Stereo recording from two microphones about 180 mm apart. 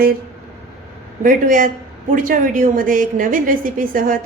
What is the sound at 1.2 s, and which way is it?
A woman's voice, 50° right (ahead or behind).